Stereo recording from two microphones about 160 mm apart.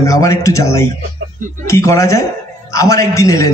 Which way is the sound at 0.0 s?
20° left (ahead or behind).